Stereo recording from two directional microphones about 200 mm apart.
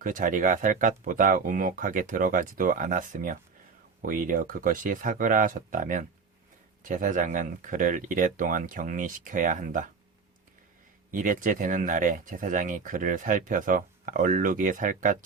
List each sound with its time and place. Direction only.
0.0 s speech: 40° right (ahead or behind)
11.1 s speech: 40° right (ahead or behind)